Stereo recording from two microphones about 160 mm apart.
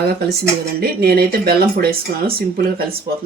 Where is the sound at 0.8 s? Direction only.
75° right (ahead or behind).